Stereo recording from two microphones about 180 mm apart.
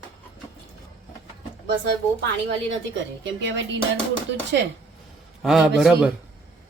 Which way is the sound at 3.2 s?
90° right.